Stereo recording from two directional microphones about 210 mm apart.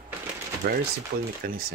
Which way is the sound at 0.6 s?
45° right (ahead or behind).